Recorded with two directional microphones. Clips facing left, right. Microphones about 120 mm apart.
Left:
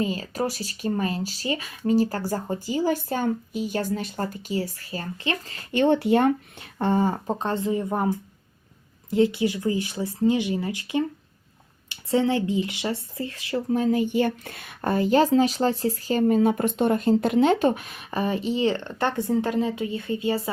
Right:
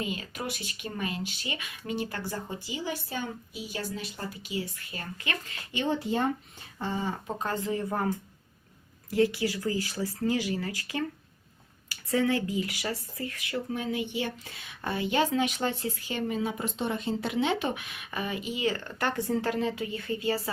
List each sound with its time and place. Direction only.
0.0 s speech: 35° left (ahead or behind)
5.7 s speech: 60° left (ahead or behind); by 7.3 s 45° left (ahead or behind)
7.3 s speech: 25° left (ahead or behind)